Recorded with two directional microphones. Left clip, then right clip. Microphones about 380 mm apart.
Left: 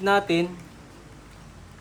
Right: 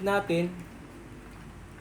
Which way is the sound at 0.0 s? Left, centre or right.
Centre.